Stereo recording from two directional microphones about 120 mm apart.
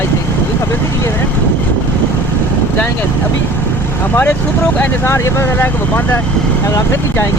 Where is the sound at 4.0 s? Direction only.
15° left (ahead or behind).